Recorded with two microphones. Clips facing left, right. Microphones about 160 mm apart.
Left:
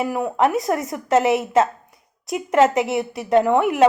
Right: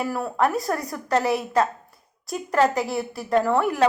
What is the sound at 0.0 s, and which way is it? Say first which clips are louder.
A woman's voice: left 4 dB; 15° left (ahead or behind).